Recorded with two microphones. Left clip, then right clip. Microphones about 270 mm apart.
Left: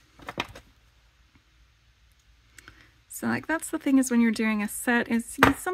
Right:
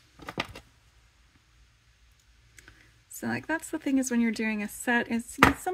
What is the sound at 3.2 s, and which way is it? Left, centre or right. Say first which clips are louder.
Speech: left 3 dB; centre.